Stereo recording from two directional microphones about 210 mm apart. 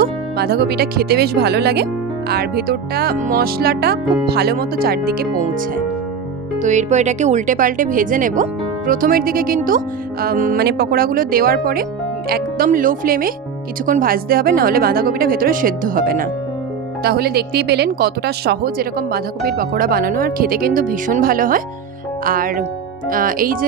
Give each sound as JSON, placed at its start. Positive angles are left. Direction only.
{"t": 0.0, "sound": "a woman's voice", "side_deg": -50}
{"t": 6.6, "sound": "a woman's voice", "side_deg": -35}